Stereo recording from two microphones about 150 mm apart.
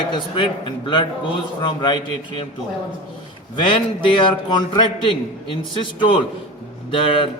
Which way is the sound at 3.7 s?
35° left (ahead or behind).